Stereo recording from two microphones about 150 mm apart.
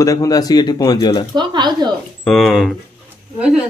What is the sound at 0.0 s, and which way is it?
A man's voice, 20° left (ahead or behind).